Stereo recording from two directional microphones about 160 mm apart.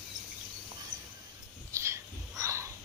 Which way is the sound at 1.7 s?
20° right (ahead or behind).